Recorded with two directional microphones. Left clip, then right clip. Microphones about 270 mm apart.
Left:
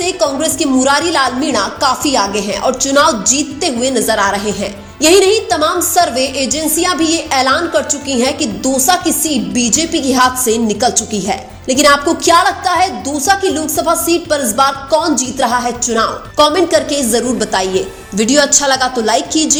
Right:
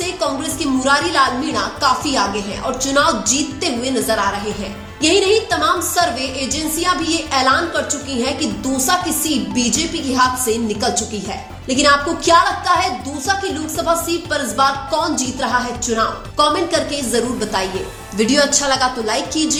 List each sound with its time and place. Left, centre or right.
0.0 s a woman's voice: left